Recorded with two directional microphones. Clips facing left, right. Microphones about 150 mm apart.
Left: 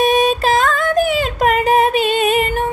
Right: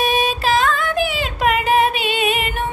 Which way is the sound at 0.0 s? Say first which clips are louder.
Left 5 dB; 45° left (ahead or behind).